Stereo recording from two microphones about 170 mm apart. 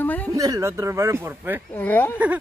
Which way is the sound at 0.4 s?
20° right (ahead or behind).